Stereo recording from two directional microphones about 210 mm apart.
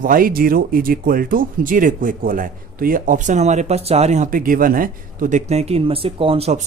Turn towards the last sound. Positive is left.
turn(degrees=-30)  # may be behind; listen again after turning